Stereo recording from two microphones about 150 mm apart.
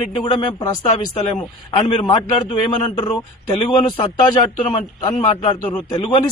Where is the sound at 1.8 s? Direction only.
35° left (ahead or behind).